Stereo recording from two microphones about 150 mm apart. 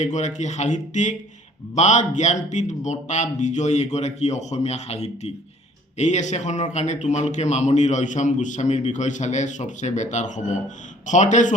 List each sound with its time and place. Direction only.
0.0 s a man's voice: 50° left (ahead or behind)